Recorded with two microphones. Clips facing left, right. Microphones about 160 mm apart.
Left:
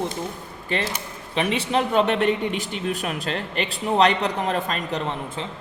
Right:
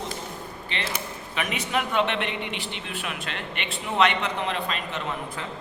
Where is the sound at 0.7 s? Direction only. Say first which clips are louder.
Left 8 dB; 45° left (ahead or behind).